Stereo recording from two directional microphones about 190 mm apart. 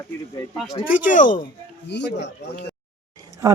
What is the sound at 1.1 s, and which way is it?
Speech, 45° left (ahead or behind).